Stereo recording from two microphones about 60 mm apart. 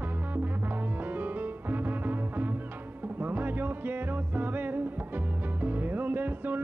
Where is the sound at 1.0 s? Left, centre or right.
Right.